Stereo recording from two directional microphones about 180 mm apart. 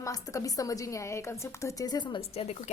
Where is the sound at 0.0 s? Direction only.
15° left (ahead or behind).